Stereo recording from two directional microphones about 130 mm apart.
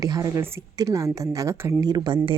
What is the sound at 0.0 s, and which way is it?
Speech, 25° right (ahead or behind).